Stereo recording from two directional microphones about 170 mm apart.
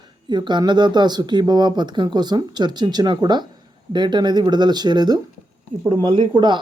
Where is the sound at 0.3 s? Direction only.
25° right (ahead or behind).